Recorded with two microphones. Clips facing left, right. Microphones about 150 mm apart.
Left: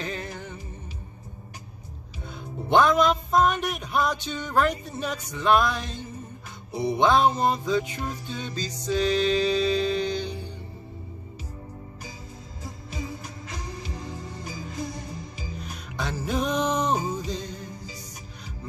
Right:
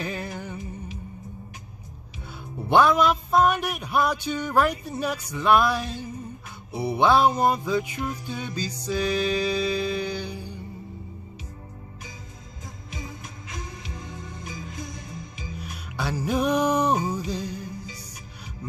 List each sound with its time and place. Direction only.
0.0 s music: 10° right (ahead or behind)
2.7 s music: 10° right (ahead or behind)
13.6 s music: 35° left (ahead or behind)
15.6 s music: 10° right (ahead or behind)